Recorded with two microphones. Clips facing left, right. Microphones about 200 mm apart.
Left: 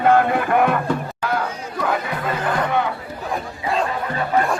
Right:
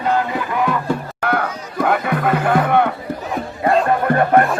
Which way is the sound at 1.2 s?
60° right (ahead or behind).